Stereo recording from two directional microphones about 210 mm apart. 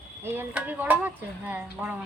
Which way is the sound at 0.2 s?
10° right (ahead or behind).